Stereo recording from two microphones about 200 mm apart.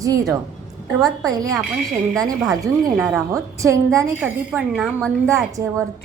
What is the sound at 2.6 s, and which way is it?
A woman's voice, 5° right (ahead or behind).